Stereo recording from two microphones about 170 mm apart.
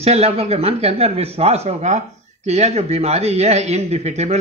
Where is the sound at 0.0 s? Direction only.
35° right (ahead or behind).